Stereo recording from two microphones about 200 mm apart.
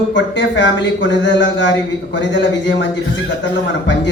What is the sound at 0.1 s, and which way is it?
A man's voice, 65° left (ahead or behind).